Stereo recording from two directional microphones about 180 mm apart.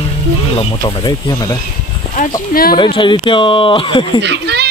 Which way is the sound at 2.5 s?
55° left (ahead or behind).